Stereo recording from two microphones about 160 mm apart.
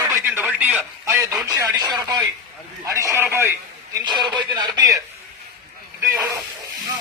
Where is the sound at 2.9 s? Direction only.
20° right (ahead or behind).